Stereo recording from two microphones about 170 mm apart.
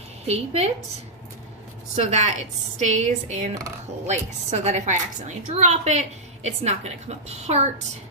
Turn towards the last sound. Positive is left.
turn(degrees=-40)  # may be behind; listen again after turning